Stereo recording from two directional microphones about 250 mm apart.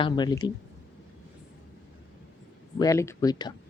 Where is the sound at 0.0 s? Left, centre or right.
Centre.